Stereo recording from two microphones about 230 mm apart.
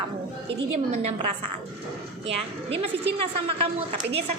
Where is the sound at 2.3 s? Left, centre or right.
Right.